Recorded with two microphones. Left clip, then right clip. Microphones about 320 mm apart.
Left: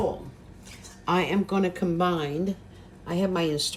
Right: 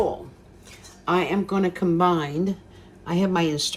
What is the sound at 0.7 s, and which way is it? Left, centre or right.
Speech, centre.